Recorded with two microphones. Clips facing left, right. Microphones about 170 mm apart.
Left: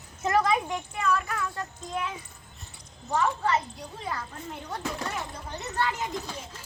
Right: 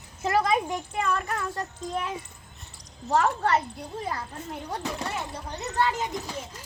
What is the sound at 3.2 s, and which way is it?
Speech, 60° right (ahead or behind).